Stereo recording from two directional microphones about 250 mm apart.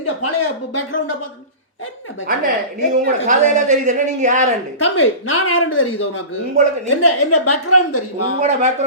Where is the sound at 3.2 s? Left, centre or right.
Right.